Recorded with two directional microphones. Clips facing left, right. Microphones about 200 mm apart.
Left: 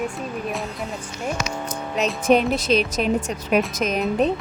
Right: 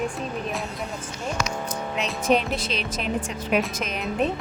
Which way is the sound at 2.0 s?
40° left (ahead or behind).